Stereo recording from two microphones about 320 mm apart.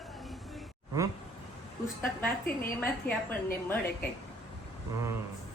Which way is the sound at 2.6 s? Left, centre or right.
Left.